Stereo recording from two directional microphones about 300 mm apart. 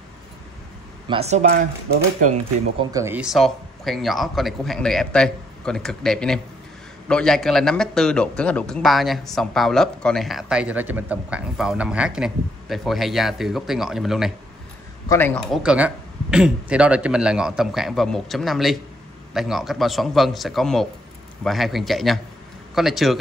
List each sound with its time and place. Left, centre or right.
1.0 s speech: centre